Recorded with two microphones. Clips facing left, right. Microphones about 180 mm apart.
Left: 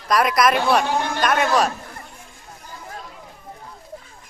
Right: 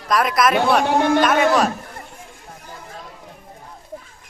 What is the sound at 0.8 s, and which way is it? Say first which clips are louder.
Speech: right 7 dB; 60° right (ahead or behind).